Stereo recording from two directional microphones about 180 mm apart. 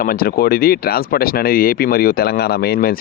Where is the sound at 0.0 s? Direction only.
55° left (ahead or behind).